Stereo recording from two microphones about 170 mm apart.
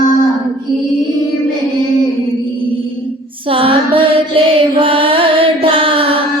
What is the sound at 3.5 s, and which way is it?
Music, 30° right (ahead or behind).